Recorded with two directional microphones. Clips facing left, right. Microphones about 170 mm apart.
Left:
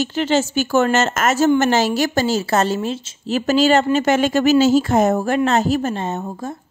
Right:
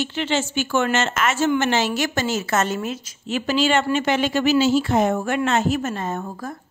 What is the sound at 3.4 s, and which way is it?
A woman's voice, 40° left (ahead or behind).